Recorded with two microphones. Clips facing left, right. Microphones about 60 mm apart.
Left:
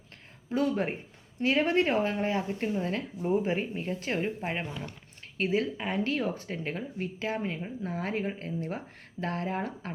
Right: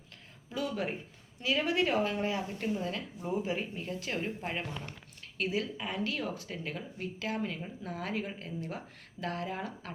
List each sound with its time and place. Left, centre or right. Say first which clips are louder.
0.5 s speech: left 6 dB; left